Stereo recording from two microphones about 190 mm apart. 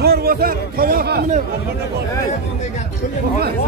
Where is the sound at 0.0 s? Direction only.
55° right (ahead or behind).